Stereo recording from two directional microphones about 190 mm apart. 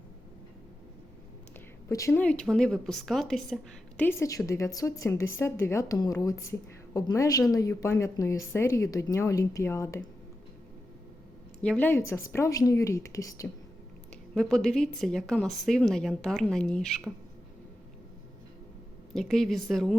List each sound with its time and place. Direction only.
1.9 s a woman's voice: 15° left (ahead or behind)
11.6 s a woman's voice: 5° left (ahead or behind)
14.3 s a woman's voice: 5° left (ahead or behind)
19.1 s a woman's voice: centre (ahead or behind)